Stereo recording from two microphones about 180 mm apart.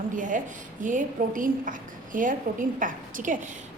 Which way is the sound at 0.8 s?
45° right (ahead or behind).